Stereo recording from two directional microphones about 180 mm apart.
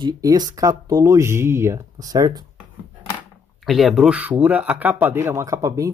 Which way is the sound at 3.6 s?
Centre (ahead or behind).